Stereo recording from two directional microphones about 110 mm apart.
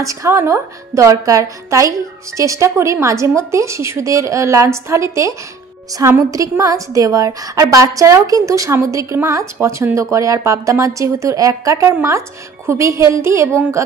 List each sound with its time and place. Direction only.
0.0 s a woman's voice: 30° right (ahead or behind)